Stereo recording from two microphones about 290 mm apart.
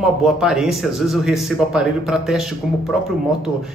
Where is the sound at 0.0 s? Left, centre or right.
Centre.